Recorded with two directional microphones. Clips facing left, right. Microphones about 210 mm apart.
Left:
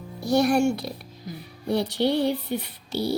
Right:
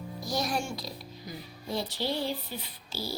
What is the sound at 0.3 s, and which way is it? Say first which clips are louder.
Speech: left 12 dB; 65° left (ahead or behind).